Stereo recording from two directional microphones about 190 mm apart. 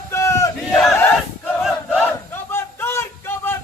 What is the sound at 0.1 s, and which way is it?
Battle cry, 15° left (ahead or behind).